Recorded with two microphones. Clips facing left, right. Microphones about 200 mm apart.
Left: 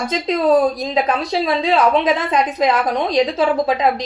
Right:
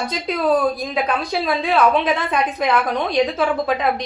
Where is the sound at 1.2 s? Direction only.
20° left (ahead or behind).